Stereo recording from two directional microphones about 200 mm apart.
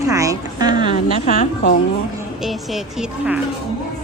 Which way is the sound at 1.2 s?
35° left (ahead or behind).